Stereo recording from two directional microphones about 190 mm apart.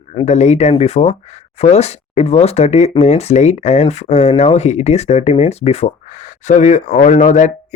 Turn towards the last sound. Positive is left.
turn(degrees=40)  # may be behind; listen again after turning